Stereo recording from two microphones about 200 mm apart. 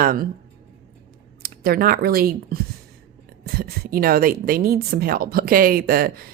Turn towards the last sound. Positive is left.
turn(degrees=-45)  # may be behind; listen again after turning